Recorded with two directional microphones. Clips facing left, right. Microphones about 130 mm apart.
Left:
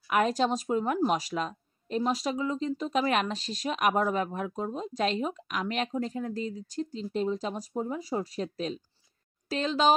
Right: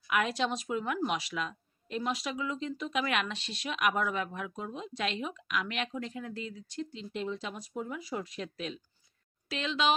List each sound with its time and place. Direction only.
0.1 s a woman's voice: 40° left (ahead or behind)